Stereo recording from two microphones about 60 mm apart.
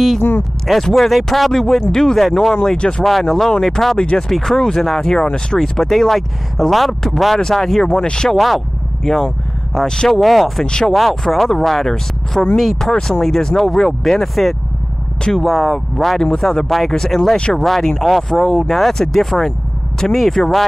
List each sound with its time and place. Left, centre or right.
0.7 s speech: centre
6.9 s speech: centre
8.4 s speech: centre
10.6 s speech: centre
10.9 s speech: centre
17.4 s speech: centre
17.6 s speech: centre